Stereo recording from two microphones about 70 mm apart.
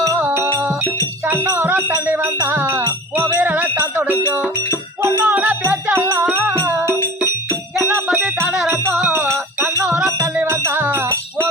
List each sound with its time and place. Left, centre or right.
0.2 s music: right
5.6 s music: right
7.8 s jingle bell: right
8.6 s music: right
9.8 s music: centre
10.4 s music: right
10.8 s music: right